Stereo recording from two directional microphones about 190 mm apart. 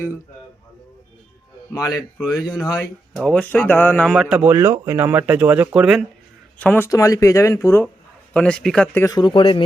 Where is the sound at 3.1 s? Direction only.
5° left (ahead or behind).